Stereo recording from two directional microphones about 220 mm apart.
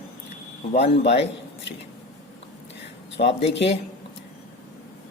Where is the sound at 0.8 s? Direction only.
50° left (ahead or behind).